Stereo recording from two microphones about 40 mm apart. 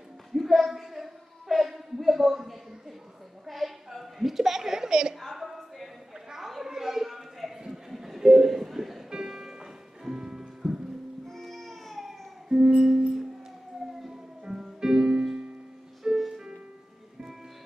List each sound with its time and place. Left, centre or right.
0.3 s a sound: centre
5.2 s a sound: centre
7.9 s music: centre
10.6 s music: centre
12.4 s music: right
14.6 s music: centre